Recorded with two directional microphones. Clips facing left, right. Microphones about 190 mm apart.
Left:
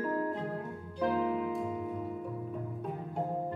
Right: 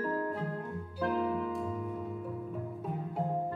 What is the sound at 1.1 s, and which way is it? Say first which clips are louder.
Music: left 1 dB; 10° left (ahead or behind).